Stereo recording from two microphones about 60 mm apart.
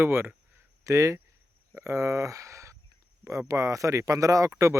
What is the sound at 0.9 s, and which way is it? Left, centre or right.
Speech, right.